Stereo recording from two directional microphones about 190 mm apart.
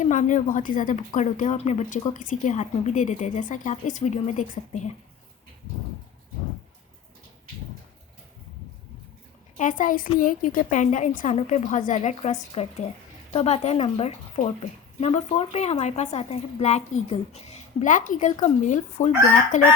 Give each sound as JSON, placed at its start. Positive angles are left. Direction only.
{"t": 0.0, "sound": "speech", "side_deg": 40}
{"t": 9.6, "sound": "a woman's voice", "side_deg": 45}